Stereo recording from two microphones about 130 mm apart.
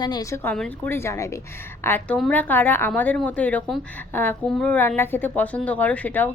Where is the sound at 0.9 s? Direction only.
20° left (ahead or behind).